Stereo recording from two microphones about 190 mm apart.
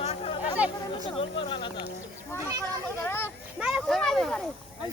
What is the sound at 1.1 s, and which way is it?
Speech, 30° left (ahead or behind).